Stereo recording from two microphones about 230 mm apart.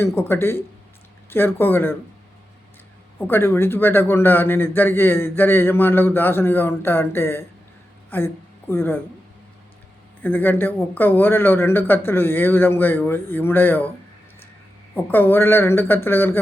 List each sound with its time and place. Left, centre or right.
0.0 s a man's voice: centre
3.2 s a man's voice: centre
10.2 s a man's voice: centre
14.9 s a man's voice: centre